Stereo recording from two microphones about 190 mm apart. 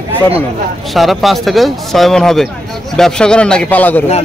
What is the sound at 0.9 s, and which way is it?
A man's voice, centre (ahead or behind).